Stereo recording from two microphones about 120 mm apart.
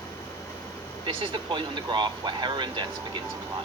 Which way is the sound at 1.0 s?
45° right (ahead or behind).